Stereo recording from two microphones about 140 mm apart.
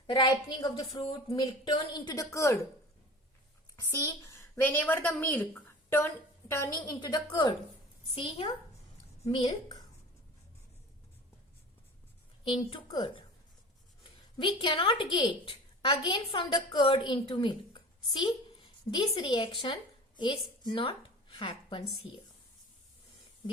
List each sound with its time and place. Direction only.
0.1 s a woman's voice: 35° left (ahead or behind)
3.8 s a woman's voice: 25° left (ahead or behind)
12.5 s a woman's voice: 35° left (ahead or behind)
14.3 s a woman's voice: 35° left (ahead or behind)
20.7 s a sound: 40° left (ahead or behind)